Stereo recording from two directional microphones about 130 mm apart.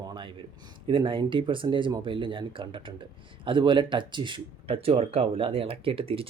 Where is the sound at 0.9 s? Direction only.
40° right (ahead or behind).